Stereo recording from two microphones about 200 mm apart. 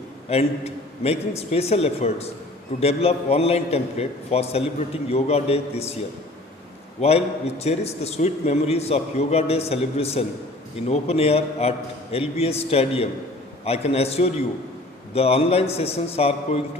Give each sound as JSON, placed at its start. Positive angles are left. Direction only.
{"t": 0.3, "sound": "a man's voice", "side_deg": 30}
{"t": 7.0, "sound": "a man's voice", "side_deg": 30}